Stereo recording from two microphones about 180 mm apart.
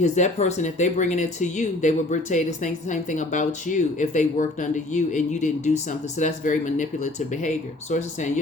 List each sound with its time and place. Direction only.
0.0 s speech: 40° left (ahead or behind)